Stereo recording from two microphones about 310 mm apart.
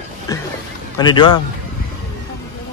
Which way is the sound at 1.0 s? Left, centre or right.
Centre.